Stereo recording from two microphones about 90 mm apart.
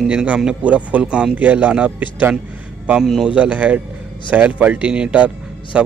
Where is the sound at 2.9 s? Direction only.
5° right (ahead or behind).